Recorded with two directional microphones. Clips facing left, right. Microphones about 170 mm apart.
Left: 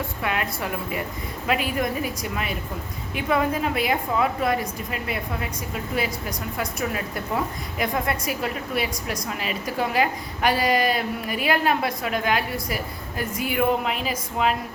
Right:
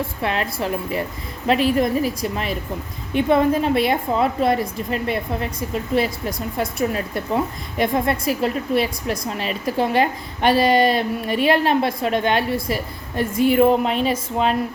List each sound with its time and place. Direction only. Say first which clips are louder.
0.2 s a woman's voice: right 3 dB; 30° right (ahead or behind)
6.6 s a woman's voice: right 6 dB; 30° right (ahead or behind)